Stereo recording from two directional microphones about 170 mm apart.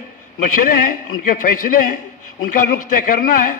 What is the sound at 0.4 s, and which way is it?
A man's voice, 50° left (ahead or behind).